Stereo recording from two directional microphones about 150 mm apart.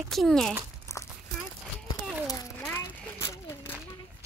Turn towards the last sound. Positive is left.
turn(degrees=30)  # may be behind; listen again after turning